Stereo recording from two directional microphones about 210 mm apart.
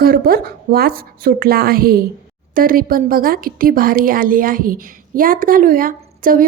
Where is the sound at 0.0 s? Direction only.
45° right (ahead or behind).